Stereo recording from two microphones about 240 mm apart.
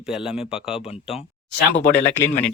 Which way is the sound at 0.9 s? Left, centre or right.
Left.